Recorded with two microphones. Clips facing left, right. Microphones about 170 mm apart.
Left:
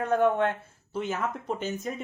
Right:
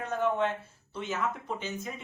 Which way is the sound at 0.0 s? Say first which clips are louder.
Left 5 dB; 55° left (ahead or behind).